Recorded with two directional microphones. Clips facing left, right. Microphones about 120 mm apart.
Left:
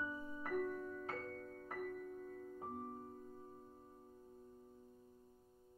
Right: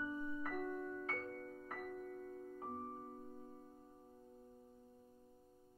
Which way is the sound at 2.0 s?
5° left (ahead or behind).